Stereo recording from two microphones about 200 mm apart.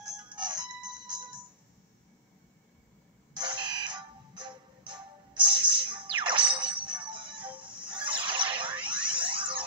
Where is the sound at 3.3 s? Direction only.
20° right (ahead or behind).